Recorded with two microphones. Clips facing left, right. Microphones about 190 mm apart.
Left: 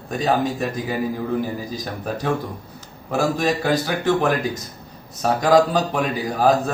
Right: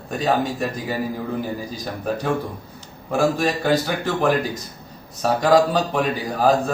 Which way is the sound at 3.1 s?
Centre (ahead or behind).